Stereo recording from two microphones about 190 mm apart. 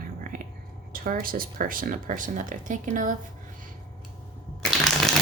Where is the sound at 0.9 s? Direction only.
50° right (ahead or behind).